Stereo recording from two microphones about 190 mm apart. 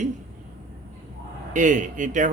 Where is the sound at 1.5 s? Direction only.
40° right (ahead or behind).